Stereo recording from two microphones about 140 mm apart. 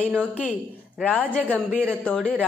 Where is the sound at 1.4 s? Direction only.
10° right (ahead or behind).